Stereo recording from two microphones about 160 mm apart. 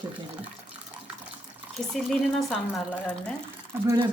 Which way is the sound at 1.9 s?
Centre (ahead or behind).